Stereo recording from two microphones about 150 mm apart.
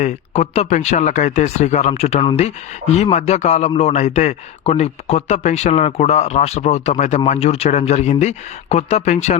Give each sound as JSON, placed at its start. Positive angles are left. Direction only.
{"t": 0.0, "sound": "speech", "side_deg": 50}